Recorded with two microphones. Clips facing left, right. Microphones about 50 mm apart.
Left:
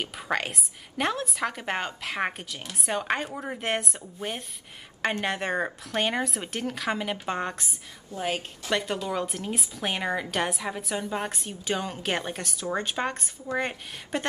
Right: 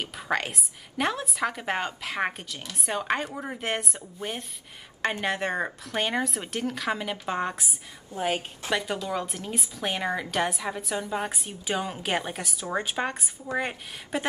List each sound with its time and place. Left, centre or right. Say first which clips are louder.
0.0 s a woman's voice: even; centre
8.1 s a woman's voice: right 2 dB; right
8.7 s a woman's voice: left 1 dB; centre